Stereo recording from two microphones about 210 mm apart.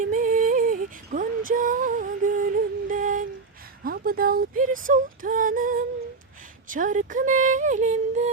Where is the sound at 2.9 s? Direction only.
40° right (ahead or behind).